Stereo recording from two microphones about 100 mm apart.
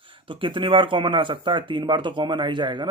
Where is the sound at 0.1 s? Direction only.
60° right (ahead or behind).